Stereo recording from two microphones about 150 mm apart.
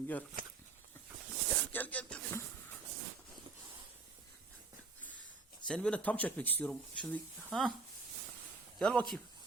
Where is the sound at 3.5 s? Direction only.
35° right (ahead or behind).